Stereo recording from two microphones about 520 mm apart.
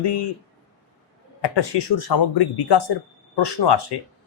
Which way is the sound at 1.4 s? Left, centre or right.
Left.